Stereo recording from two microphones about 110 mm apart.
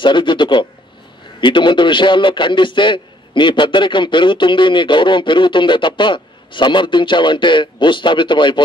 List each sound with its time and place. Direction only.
0.0 s a man's voice: 50° left (ahead or behind)